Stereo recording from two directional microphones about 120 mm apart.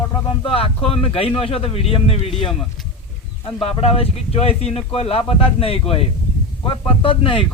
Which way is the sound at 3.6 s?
55° left (ahead or behind).